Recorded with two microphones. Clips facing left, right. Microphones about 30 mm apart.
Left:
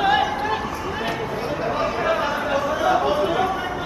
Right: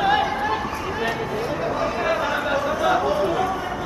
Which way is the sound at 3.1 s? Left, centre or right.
Centre.